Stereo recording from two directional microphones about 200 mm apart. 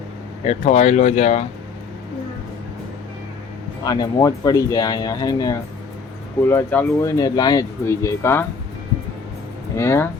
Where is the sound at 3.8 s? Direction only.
20° left (ahead or behind).